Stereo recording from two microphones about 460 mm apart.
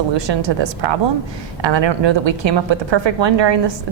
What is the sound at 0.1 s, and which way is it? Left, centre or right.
Speech, right.